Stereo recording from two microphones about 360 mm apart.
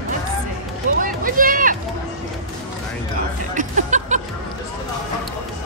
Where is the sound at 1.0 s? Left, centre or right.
Right.